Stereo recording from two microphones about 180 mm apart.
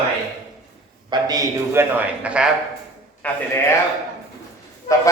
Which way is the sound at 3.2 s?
10° left (ahead or behind).